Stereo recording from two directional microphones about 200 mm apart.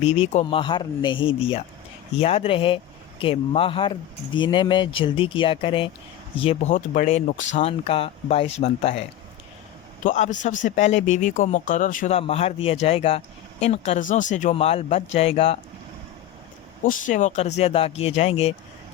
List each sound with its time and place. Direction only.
0.0 s speech: 30° left (ahead or behind)
10.0 s speech: 40° left (ahead or behind)
16.8 s speech: 40° left (ahead or behind)